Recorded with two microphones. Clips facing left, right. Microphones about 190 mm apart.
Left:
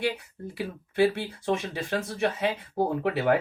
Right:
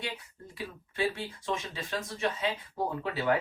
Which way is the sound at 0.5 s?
65° left (ahead or behind).